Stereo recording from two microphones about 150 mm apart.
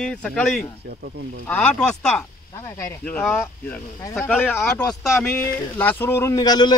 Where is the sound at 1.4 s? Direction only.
10° left (ahead or behind).